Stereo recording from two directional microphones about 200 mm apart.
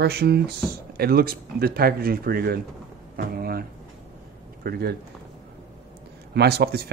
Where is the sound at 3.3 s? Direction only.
50° right (ahead or behind).